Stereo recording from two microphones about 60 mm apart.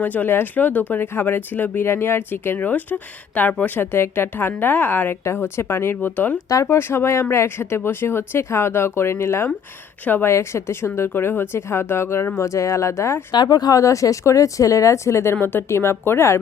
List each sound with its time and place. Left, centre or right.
0.0 s speech: left
3.8 s speech: left
5.2 s speech: left
6.5 s speech: left
6.7 s speech: left
10.0 s speech: left
10.2 s speech: left
13.5 s speech: left
15.4 s speech: left